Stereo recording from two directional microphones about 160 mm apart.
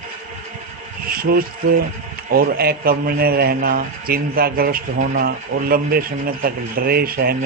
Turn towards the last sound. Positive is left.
turn(degrees=-70)  # may be behind; listen again after turning